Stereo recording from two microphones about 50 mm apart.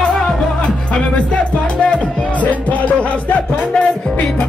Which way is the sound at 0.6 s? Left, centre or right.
Left.